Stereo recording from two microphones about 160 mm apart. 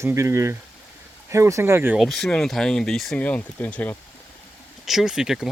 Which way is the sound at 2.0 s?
5° left (ahead or behind).